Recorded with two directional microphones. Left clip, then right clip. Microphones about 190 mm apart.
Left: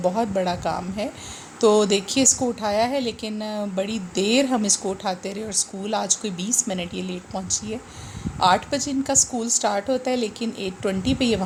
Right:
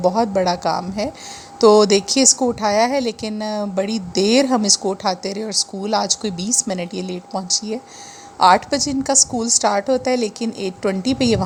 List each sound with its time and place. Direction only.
0.0 s speech: 35° right (ahead or behind)
8.4 s speech: 35° right (ahead or behind)